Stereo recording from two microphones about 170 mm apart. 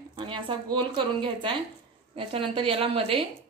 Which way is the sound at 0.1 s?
30° right (ahead or behind).